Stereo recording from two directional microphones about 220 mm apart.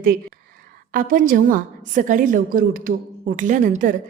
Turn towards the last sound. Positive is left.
turn(degrees=-35)  # may be behind; listen again after turning